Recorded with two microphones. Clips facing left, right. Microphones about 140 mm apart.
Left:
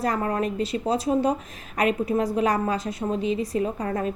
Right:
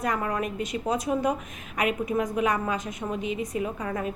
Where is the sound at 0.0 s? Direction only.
35° left (ahead or behind).